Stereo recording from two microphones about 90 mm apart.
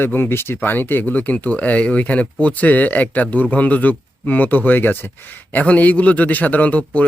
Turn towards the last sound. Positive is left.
turn(degrees=15)  # may be behind; listen again after turning